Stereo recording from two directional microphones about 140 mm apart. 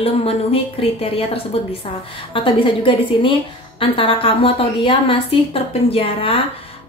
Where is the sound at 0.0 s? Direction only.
45° left (ahead or behind).